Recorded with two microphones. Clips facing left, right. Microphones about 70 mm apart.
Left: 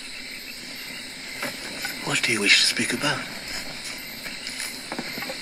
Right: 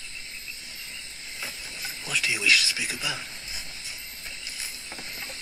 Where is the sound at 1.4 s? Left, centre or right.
Left.